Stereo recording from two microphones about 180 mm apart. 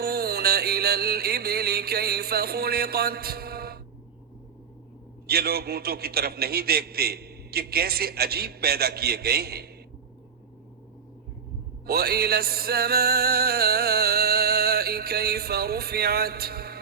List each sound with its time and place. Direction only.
0.0 s music: 60° right (ahead or behind)
5.2 s a man's voice: 60° right (ahead or behind)
11.9 s music: 60° right (ahead or behind)